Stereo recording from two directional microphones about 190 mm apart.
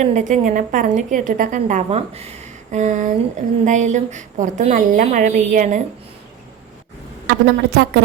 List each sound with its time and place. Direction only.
0.0 s a woman's voice: 40° right (ahead or behind)
7.3 s a woman's voice: 55° right (ahead or behind)